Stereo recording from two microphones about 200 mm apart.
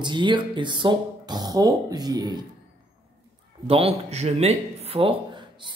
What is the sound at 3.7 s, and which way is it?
Speech, 30° right (ahead or behind).